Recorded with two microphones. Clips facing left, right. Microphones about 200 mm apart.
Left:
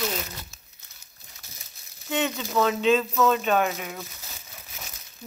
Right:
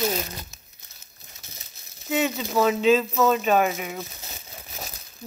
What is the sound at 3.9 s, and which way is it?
Crumpling, 25° right (ahead or behind).